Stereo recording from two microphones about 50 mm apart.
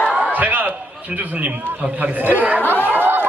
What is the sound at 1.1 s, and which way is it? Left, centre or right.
A man's voice, right.